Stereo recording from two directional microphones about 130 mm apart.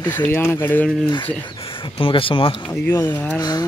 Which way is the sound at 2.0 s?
45° left (ahead or behind).